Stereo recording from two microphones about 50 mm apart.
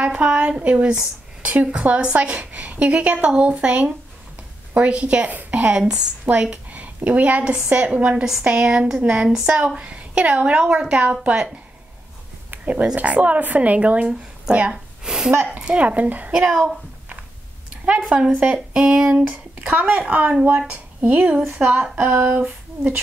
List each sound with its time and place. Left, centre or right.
0.0 s a woman's voice: right
5.6 s a woman's voice: right
6.3 s a woman's voice: right
12.9 s a woman's voice: right
15.0 s a sound: centre
15.6 s speech: right
17.8 s a woman's voice: right
19.6 s a woman's voice: right
20.4 s a woman's voice: right